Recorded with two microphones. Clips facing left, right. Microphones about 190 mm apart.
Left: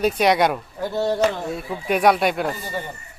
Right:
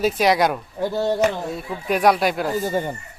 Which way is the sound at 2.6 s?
45° right (ahead or behind).